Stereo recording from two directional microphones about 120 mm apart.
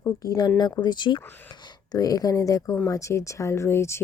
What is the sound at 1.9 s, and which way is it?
Speech, 30° left (ahead or behind).